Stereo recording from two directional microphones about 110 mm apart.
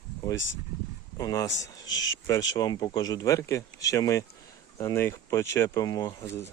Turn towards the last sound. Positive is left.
turn(degrees=35)  # may be behind; listen again after turning